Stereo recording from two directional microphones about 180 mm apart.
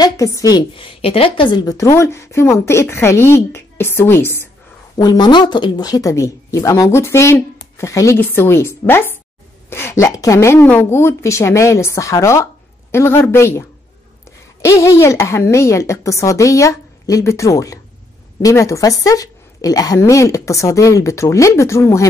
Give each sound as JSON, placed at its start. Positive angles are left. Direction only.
{"t": 0.0, "sound": "a woman's voice", "side_deg": 20}